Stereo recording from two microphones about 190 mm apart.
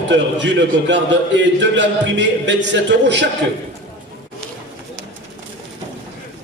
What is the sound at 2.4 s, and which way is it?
Speech, 70° right (ahead or behind).